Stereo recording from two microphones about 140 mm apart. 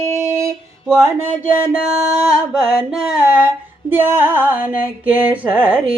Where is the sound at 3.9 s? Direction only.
15° right (ahead or behind).